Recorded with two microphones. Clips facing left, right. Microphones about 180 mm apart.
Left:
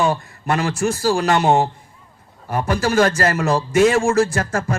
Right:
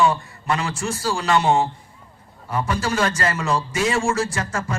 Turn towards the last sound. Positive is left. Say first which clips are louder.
# left 6 dB
turn(degrees=60)  # may be behind; listen again after turning